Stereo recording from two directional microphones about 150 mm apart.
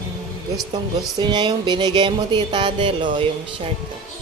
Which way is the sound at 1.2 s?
30° right (ahead or behind).